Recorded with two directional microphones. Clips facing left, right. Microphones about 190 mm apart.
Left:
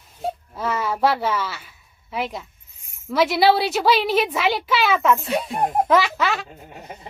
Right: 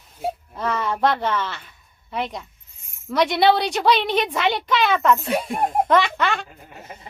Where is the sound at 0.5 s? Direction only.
5° left (ahead or behind).